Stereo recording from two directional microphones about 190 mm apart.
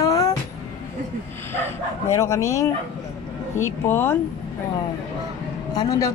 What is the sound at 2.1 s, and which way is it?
Speech, 15° left (ahead or behind).